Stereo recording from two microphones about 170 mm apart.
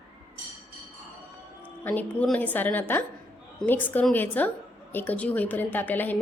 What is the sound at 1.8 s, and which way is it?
A woman's voice, 10° left (ahead or behind).